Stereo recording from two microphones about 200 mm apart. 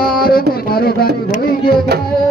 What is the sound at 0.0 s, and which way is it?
Music, 50° left (ahead or behind).